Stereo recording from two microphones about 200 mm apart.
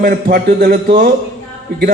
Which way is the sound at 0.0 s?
50° right (ahead or behind).